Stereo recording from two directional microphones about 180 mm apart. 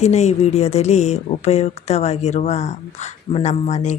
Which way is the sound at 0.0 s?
40° left (ahead or behind).